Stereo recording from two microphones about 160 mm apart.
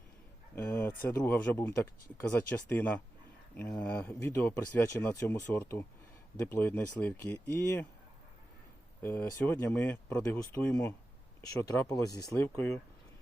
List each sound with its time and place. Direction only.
0.5 s speech: 10° left (ahead or behind)
9.0 s speech: 15° left (ahead or behind)